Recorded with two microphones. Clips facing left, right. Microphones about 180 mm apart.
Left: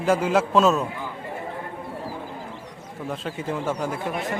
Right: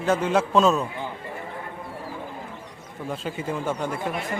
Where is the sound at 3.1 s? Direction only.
Centre (ahead or behind).